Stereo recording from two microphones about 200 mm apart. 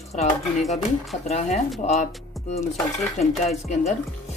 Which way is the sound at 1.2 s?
35° left (ahead or behind).